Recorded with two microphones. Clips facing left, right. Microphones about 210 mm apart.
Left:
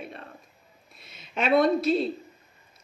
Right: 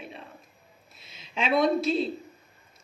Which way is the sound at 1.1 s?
50° left (ahead or behind).